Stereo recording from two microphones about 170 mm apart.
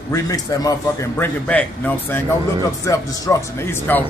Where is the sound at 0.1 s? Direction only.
20° left (ahead or behind).